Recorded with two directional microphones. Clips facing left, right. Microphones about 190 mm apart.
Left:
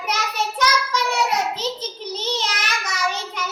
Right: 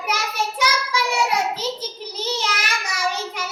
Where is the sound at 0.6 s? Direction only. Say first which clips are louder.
Left 2 dB; 10° right (ahead or behind).